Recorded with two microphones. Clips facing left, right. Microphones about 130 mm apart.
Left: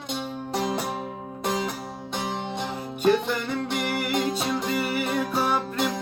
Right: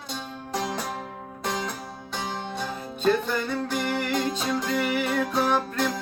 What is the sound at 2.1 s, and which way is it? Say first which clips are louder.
Music: left 2 dB; 20° left (ahead or behind).